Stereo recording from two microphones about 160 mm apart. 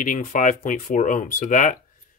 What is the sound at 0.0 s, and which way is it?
Speech, 55° left (ahead or behind).